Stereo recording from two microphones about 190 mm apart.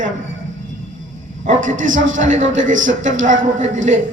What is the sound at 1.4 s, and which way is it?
A man's voice, 40° right (ahead or behind).